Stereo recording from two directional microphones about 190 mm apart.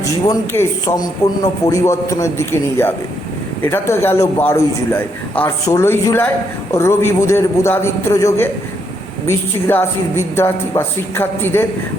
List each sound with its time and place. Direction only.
0.0 s a woman's voice: 15° left (ahead or behind)